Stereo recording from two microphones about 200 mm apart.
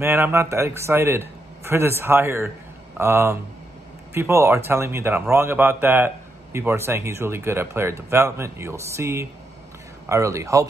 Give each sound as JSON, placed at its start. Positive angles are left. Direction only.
{"t": 0.0, "sound": "speech", "side_deg": -10}